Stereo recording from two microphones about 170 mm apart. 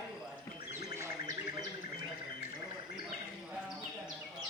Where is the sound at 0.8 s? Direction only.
20° right (ahead or behind).